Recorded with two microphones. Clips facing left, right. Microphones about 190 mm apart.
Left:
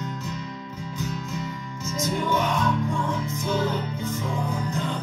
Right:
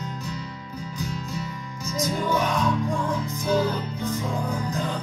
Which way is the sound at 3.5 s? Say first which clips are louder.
Right 3 dB; 35° right (ahead or behind).